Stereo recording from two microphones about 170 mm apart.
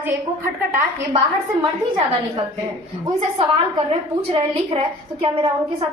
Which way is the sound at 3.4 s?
35° right (ahead or behind).